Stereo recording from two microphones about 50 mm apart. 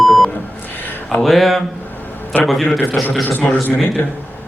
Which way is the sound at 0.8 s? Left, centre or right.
Left.